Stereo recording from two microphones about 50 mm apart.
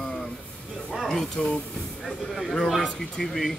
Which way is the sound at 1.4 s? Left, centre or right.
Centre.